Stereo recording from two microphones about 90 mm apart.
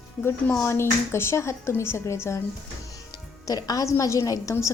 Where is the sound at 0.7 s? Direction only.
30° left (ahead or behind).